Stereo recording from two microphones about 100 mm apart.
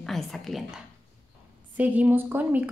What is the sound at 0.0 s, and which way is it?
Speech, centre (ahead or behind).